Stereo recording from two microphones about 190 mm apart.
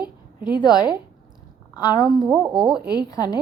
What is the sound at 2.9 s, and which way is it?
Speech, 20° left (ahead or behind).